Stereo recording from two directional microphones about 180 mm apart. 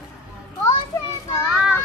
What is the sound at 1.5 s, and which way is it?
Child singing, 5° right (ahead or behind).